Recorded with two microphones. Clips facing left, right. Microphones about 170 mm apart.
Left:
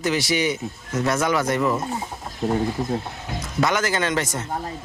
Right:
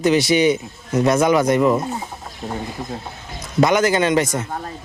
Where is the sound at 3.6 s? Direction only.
15° right (ahead or behind).